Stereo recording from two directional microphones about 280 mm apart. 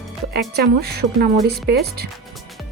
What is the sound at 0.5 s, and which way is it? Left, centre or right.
Speech, right.